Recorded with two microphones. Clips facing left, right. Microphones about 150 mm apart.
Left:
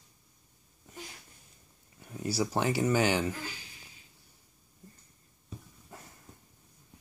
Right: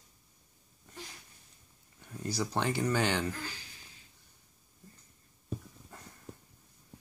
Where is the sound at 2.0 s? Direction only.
10° left (ahead or behind).